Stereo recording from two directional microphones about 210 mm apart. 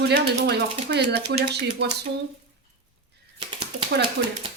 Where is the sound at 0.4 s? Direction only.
50° right (ahead or behind).